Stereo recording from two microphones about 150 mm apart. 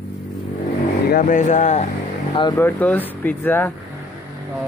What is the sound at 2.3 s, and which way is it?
Speech, 30° left (ahead or behind).